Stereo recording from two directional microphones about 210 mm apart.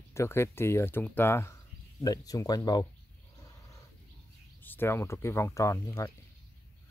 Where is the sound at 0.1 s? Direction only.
15° left (ahead or behind).